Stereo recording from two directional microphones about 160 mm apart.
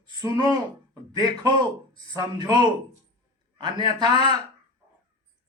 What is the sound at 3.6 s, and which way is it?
Speech, 30° right (ahead or behind).